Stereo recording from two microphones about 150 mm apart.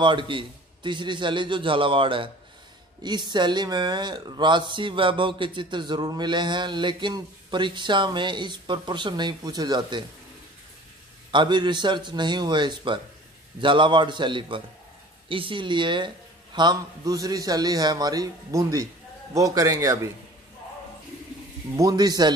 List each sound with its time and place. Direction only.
0.0 s speech: 35° right (ahead or behind)
11.3 s a man's voice: 30° right (ahead or behind)
21.7 s a man's voice: 25° right (ahead or behind)